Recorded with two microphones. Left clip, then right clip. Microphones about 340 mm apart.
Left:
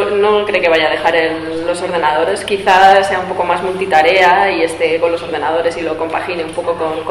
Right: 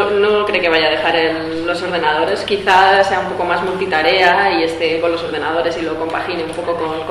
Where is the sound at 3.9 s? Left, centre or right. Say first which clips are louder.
Left 4 dB; centre.